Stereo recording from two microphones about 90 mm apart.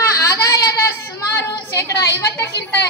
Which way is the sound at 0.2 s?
35° left (ahead or behind).